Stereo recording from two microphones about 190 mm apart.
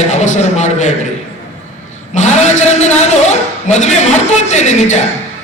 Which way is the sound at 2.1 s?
40° left (ahead or behind).